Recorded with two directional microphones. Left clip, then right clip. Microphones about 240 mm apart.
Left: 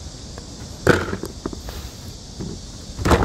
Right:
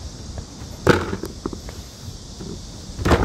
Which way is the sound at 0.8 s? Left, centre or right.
Centre.